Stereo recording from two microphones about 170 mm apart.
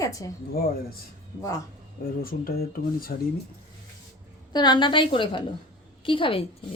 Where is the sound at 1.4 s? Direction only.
20° left (ahead or behind).